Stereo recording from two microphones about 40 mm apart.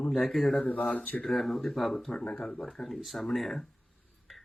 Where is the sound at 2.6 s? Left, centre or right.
Centre.